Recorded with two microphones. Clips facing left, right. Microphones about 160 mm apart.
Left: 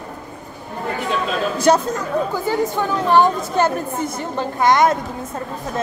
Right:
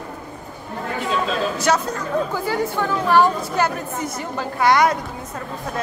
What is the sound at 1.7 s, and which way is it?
Speech, 35° left (ahead or behind).